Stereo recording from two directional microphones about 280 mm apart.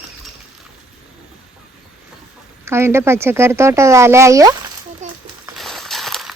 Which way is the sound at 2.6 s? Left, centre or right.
Centre.